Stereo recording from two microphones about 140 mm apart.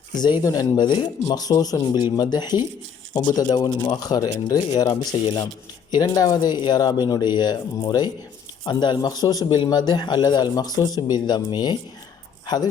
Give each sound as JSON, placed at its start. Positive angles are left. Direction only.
{"t": 0.1, "sound": "a man's voice", "side_deg": 30}